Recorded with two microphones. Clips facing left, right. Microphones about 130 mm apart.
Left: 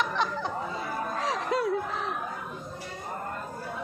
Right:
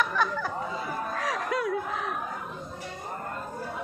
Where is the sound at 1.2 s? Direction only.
25° left (ahead or behind).